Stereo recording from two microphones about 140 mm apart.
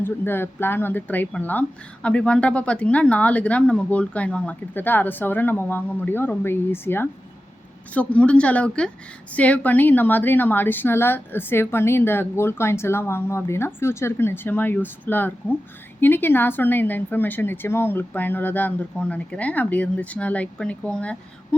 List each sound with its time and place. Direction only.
0.0 s speech: 15° left (ahead or behind)